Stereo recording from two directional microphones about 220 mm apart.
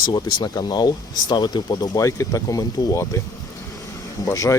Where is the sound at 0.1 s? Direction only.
20° left (ahead or behind).